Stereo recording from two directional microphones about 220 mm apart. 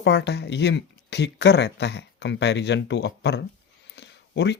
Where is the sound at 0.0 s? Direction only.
50° left (ahead or behind).